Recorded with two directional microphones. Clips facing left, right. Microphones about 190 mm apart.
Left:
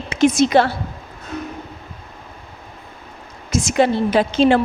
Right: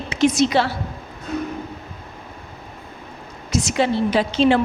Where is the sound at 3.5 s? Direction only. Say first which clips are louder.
Left 3 dB; 50° left (ahead or behind).